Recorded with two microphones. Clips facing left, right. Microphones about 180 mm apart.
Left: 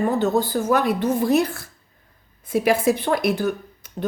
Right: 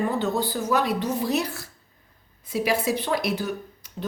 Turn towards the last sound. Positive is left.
turn(degrees=55)  # may be behind; listen again after turning